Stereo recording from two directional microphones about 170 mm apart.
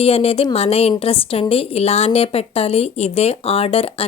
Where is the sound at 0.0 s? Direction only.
35° left (ahead or behind).